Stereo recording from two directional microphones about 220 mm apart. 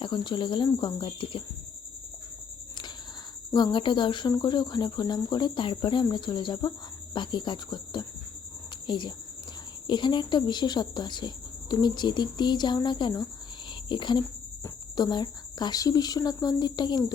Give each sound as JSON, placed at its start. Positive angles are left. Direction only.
{"t": 0.0, "sound": "speech", "side_deg": 20}
{"t": 3.5, "sound": "speech", "side_deg": 20}